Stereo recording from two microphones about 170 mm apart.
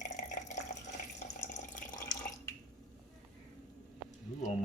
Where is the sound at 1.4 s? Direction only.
50° left (ahead or behind).